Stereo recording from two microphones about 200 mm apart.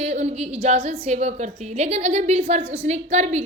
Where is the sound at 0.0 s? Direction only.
35° right (ahead or behind).